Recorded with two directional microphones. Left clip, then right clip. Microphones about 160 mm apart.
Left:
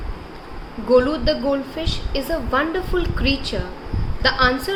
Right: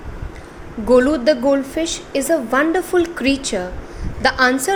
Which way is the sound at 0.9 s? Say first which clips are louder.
Right 3 dB; 45° right (ahead or behind).